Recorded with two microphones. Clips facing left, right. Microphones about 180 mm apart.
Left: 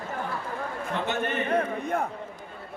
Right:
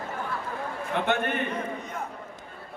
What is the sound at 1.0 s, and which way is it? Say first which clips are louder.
Speech: right 3 dB; 55° right (ahead or behind).